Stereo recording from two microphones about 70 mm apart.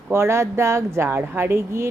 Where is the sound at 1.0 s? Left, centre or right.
Right.